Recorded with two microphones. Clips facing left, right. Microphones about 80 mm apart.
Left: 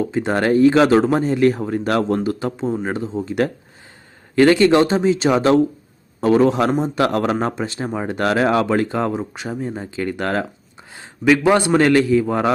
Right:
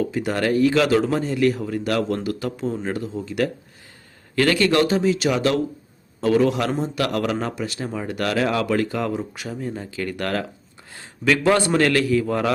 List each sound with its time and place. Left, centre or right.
0.0 s a man's voice: left